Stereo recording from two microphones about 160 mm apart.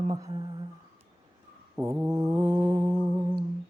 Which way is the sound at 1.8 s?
15° right (ahead or behind).